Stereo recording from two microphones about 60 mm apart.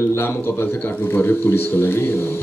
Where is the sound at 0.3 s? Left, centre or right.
Left.